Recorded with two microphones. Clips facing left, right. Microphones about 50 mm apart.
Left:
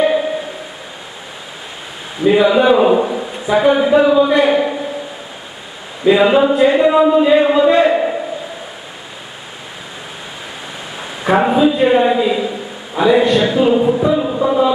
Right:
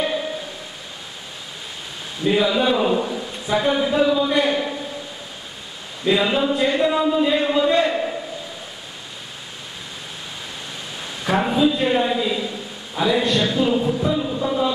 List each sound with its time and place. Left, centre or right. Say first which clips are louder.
2.2 s speech: left 8 dB; left
6.0 s a man's voice: left 8 dB; centre
11.0 s a man's voice: left 7 dB; left